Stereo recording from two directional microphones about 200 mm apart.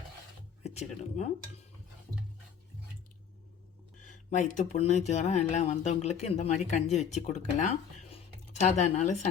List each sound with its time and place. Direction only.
0.6 s speech: 35° left (ahead or behind)
4.0 s speech: 35° left (ahead or behind)